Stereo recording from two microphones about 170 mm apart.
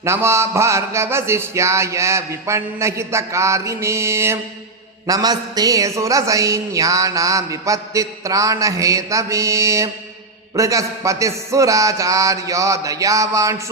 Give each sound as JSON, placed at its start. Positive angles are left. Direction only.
{"t": 0.0, "sound": "music", "side_deg": -15}
{"t": 5.0, "sound": "a woman's voice", "side_deg": -20}